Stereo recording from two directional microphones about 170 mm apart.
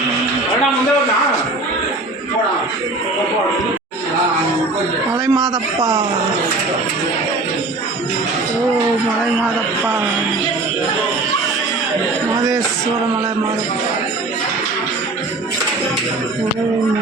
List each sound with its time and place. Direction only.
5.2 s a man's voice: 25° right (ahead or behind)